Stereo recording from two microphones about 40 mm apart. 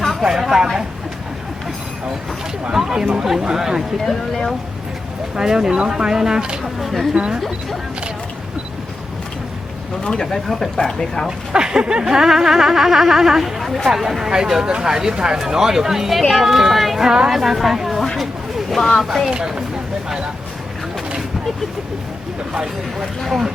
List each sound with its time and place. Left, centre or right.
0.2 s speech: centre
2.7 s speech: centre
3.9 s speech: centre
5.4 s speech: centre
6.6 s speech: centre
7.1 s speech: centre
10.1 s speech: centre
11.3 s speech: centre
17.1 s speech: centre
18.2 s a sound: centre
19.0 s speech: centre
19.3 s speech: right